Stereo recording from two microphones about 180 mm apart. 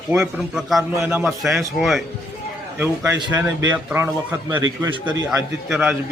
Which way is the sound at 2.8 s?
10° right (ahead or behind).